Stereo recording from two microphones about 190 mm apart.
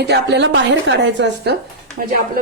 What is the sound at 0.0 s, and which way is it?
A woman's voice, 65° right (ahead or behind).